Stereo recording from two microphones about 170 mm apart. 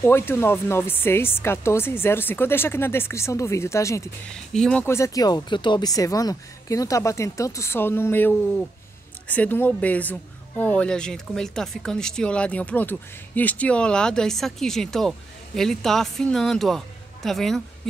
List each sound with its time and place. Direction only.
0.0 s speech: 15° left (ahead or behind)
4.3 s speech: 5° left (ahead or behind)